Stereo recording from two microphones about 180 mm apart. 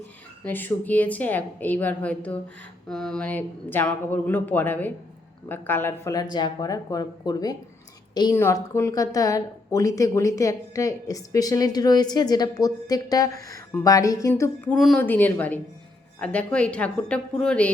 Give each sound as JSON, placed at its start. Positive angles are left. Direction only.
{"t": 0.4, "sound": "a woman's voice", "side_deg": 10}